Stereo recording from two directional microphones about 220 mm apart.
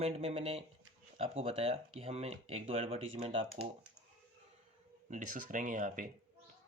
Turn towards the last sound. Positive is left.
turn(degrees=-35)  # may be behind; listen again after turning